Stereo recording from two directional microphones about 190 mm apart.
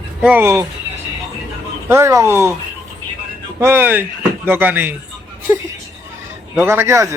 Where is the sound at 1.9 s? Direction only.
15° right (ahead or behind).